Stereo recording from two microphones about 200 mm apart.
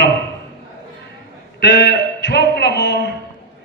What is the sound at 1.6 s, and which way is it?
Speech, 55° left (ahead or behind).